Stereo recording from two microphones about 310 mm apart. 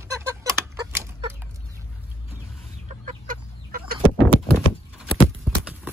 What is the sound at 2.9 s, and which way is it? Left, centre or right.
Chicken, right.